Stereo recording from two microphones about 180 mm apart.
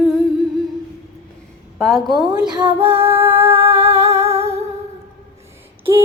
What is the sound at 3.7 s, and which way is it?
Humming, 15° right (ahead or behind).